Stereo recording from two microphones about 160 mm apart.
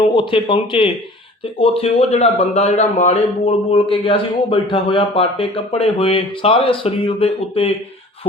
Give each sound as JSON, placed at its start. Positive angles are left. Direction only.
{"t": 0.0, "sound": "a man's voice", "side_deg": 30}